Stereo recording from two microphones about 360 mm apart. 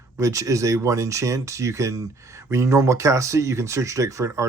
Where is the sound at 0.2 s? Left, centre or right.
Centre.